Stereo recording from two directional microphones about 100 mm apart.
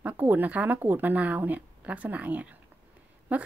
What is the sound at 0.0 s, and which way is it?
A woman's voice, 15° right (ahead or behind).